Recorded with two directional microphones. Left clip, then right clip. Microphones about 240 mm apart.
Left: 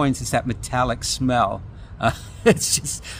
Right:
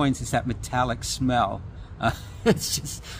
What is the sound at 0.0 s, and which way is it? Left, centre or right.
Speech, left.